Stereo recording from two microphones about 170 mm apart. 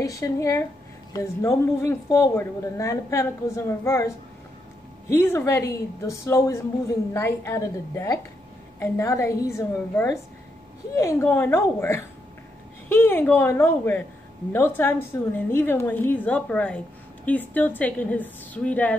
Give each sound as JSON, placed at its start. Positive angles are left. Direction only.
{"t": 0.0, "sound": "a woman's voice", "side_deg": 20}
{"t": 5.1, "sound": "a woman's voice", "side_deg": 15}